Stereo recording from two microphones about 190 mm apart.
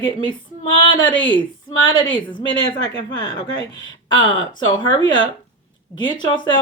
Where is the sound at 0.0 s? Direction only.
25° left (ahead or behind).